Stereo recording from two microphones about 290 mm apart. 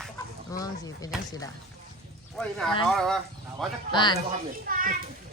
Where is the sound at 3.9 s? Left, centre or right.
Centre.